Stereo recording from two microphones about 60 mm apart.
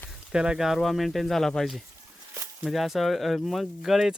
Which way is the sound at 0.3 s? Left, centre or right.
Centre.